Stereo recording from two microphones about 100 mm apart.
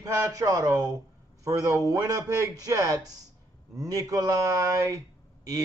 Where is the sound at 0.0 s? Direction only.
35° right (ahead or behind).